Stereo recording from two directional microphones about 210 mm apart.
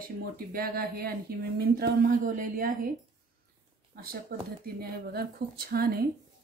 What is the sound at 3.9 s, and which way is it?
Speech, 45° right (ahead or behind).